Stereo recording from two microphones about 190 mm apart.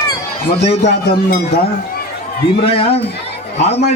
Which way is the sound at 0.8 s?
60° left (ahead or behind).